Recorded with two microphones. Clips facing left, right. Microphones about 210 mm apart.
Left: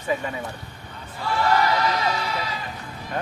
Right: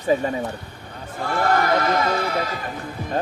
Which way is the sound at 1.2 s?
50° right (ahead or behind).